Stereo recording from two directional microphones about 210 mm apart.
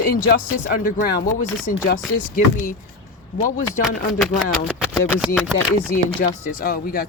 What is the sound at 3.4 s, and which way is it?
Speech, 40° left (ahead or behind).